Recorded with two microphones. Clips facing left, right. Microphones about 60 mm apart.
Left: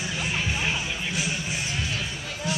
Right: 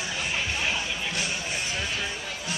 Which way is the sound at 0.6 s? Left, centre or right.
Centre.